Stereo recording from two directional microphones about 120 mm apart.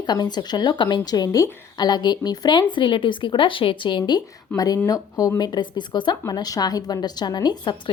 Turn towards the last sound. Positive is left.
turn(degrees=35)  # may be behind; listen again after turning